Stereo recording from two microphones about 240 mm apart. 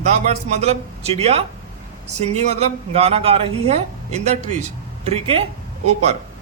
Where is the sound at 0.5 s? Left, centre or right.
Right.